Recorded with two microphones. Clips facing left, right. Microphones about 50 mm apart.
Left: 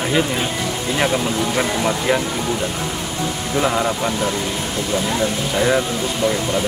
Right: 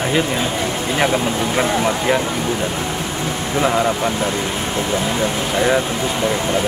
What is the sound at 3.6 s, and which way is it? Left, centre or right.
Speech, centre.